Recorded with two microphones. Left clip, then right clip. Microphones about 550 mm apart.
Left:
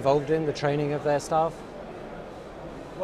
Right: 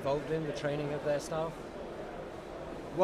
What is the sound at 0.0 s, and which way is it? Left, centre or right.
Speech, left.